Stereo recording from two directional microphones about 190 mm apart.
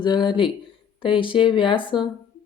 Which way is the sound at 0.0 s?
25° left (ahead or behind).